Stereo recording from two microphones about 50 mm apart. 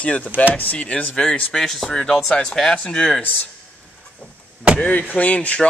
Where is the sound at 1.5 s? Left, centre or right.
Centre.